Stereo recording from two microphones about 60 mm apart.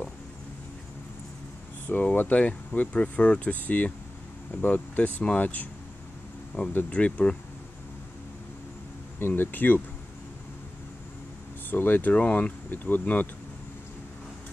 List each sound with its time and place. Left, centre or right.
1.9 s speech: left
6.9 s speech: left
9.2 s speech: left
11.7 s speech: left